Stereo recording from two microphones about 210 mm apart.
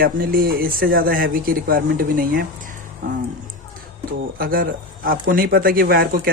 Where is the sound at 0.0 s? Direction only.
45° right (ahead or behind).